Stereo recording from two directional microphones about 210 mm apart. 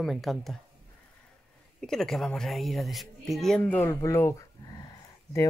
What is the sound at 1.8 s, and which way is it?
A woman's voice, centre (ahead or behind).